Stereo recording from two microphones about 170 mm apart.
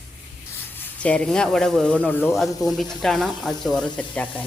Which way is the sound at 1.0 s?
5° left (ahead or behind).